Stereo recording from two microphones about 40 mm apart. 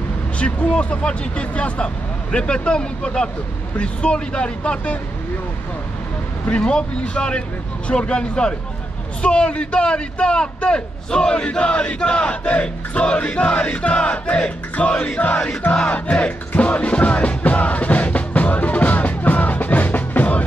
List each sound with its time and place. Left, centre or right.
0.4 s battle cry: left
6.5 s battle cry: left
14.3 s music: left